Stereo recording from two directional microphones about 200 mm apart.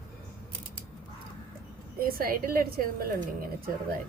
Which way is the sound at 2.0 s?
45° right (ahead or behind).